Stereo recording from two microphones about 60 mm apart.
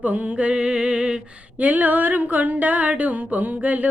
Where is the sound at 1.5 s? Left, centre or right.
Right.